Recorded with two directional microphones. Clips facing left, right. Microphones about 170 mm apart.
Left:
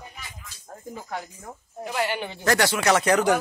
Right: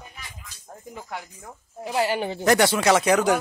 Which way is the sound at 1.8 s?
35° right (ahead or behind).